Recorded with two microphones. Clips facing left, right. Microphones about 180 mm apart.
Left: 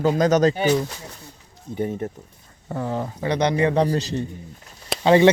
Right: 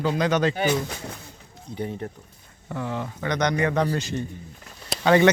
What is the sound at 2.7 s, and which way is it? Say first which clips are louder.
Speech: left 3 dB; 35° left (ahead or behind).